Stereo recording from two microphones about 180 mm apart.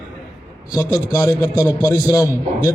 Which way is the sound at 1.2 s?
20° left (ahead or behind).